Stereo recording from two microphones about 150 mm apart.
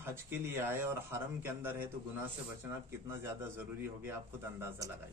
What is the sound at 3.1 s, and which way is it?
Speech, 15° right (ahead or behind).